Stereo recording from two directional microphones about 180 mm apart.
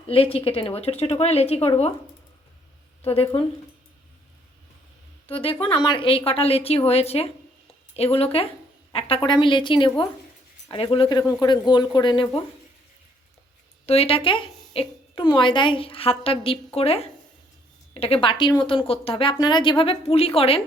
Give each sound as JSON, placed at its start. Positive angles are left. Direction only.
{"t": 0.1, "sound": "a woman's voice", "side_deg": 30}
{"t": 3.0, "sound": "a woman's voice", "side_deg": 30}
{"t": 5.2, "sound": "a woman's voice", "side_deg": 30}
{"t": 13.8, "sound": "a woman's voice", "side_deg": 35}